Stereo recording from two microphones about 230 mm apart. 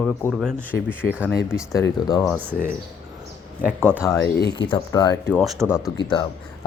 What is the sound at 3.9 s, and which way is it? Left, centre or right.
Speech, centre.